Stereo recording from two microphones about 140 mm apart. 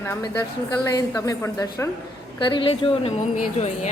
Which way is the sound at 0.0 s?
20° left (ahead or behind).